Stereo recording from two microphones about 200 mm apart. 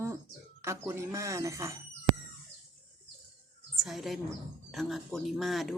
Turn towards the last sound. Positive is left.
turn(degrees=0)  # may be behind; listen again after turning